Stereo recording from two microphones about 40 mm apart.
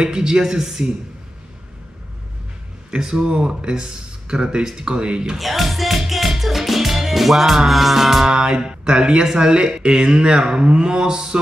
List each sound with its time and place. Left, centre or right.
0.0 s speech: centre
2.9 s speech: centre
5.4 s music: centre
8.3 s speech: right